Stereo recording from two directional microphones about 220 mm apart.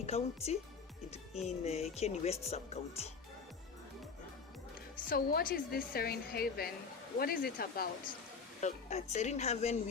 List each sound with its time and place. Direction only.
0.0 s speech: 30° left (ahead or behind)
5.0 s a woman's voice: 40° left (ahead or behind)
8.6 s a woman's voice: 30° left (ahead or behind)